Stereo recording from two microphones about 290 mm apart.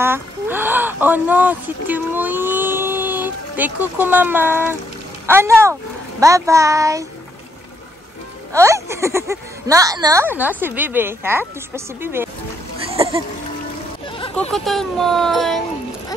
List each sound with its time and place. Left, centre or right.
0.0 s a child's voice: centre
8.5 s a woman's voice: centre
12.9 s music: centre
14.0 s a sound: centre
14.5 s speech: centre